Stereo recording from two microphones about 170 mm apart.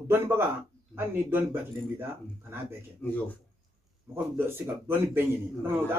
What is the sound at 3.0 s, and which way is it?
Speech, 10° left (ahead or behind).